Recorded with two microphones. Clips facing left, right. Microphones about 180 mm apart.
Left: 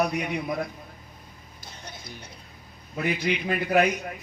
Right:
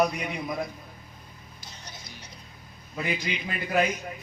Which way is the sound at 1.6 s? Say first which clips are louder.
Left 4 dB; 55° left (ahead or behind).